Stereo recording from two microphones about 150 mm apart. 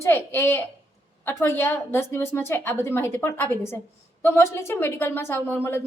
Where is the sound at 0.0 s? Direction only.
15° left (ahead or behind).